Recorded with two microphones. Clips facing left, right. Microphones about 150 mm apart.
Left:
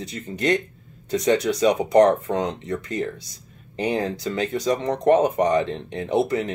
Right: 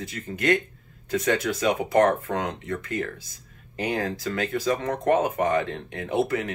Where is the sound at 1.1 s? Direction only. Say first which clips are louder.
Left 4 dB; 25° left (ahead or behind).